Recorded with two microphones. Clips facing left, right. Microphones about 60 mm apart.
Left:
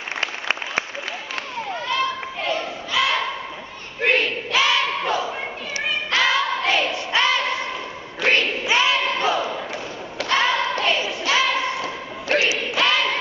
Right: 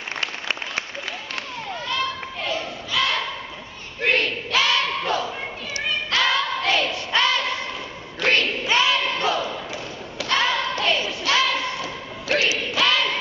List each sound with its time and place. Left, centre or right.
0.2 s applause: centre
1.7 s children playing: centre
2.9 s a sound: centre
4.0 s battle cry: centre
5.9 s choir: centre
8.2 s a sound: centre
10.2 s thump: centre
12.5 s crowd: centre